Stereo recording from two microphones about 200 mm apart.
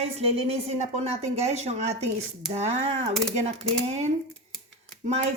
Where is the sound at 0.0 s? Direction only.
30° right (ahead or behind).